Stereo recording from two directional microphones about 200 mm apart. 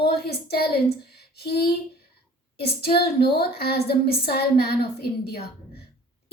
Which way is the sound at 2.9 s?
50° left (ahead or behind).